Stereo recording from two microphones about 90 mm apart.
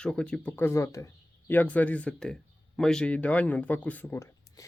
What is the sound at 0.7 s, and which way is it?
Speech, 35° left (ahead or behind).